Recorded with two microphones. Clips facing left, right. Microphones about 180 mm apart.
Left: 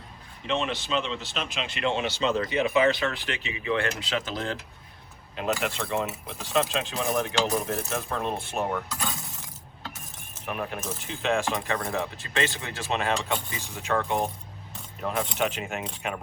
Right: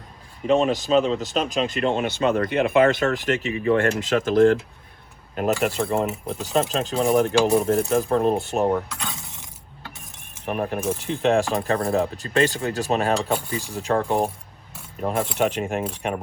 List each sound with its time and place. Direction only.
0.4 s speech: 40° right (ahead or behind)
9.0 s shatter: centre (ahead or behind)
10.4 s speech: 40° right (ahead or behind)
11.1 s speech: 55° right (ahead or behind)
11.3 s speech: 35° right (ahead or behind)